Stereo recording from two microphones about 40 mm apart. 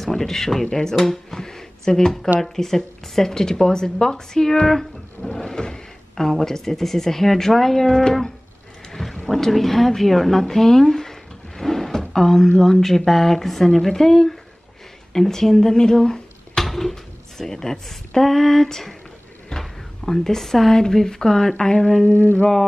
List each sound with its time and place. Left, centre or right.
0.0 s speech: centre
5.3 s speech: centre
9.1 s a sound: centre
12.4 s speech: centre
16.6 s a sound: centre
20.7 s speech: centre
22.1 s mantra: left